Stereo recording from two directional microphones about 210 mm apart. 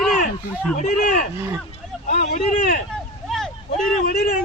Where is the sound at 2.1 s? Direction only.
45° left (ahead or behind).